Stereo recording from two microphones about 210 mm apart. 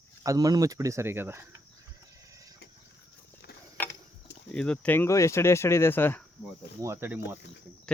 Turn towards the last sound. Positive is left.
turn(degrees=-10)  # may be behind; listen again after turning